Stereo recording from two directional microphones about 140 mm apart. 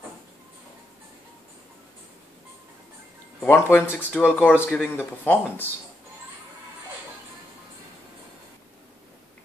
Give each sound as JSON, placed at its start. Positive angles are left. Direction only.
{"t": 3.3, "sound": "speech", "side_deg": 15}